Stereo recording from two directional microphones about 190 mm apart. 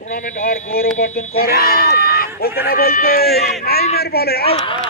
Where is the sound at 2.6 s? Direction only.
50° left (ahead or behind).